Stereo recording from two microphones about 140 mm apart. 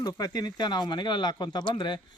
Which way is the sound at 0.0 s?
25° left (ahead or behind).